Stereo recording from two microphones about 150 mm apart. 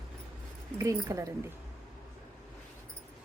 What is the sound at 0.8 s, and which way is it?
Speech, 20° right (ahead or behind).